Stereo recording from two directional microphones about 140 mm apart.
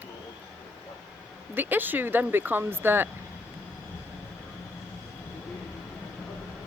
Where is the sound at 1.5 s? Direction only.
15° right (ahead or behind).